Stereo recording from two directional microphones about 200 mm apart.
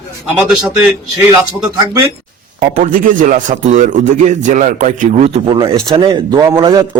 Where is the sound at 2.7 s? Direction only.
40° right (ahead or behind).